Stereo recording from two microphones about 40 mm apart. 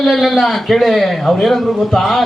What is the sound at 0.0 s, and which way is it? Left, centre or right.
A man's voice, centre.